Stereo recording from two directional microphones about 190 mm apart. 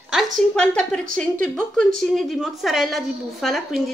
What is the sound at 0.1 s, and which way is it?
A woman's voice, 5° left (ahead or behind).